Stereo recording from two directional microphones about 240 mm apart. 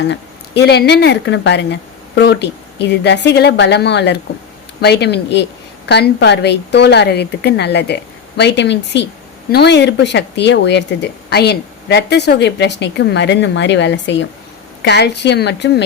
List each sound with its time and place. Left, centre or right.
0.0 s speech: left